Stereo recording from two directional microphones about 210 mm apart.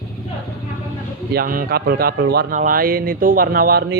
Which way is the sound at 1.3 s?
40° right (ahead or behind).